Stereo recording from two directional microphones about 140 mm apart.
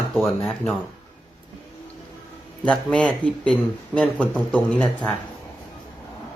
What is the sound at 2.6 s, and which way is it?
Speech, 10° left (ahead or behind).